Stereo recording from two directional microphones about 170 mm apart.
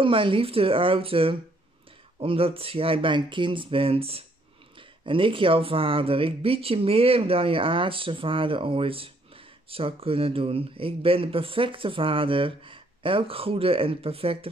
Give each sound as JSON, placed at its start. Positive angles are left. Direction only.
{"t": 0.0, "sound": "speech", "side_deg": -30}